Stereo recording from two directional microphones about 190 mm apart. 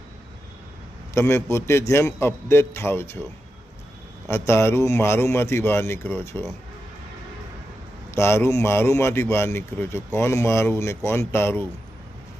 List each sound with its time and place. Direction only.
1.1 s speech: 15° left (ahead or behind)
4.3 s speech: 15° left (ahead or behind)
8.1 s speech: 15° left (ahead or behind)